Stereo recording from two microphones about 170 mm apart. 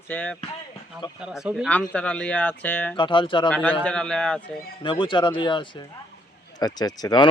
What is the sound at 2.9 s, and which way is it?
Speech, 30° left (ahead or behind).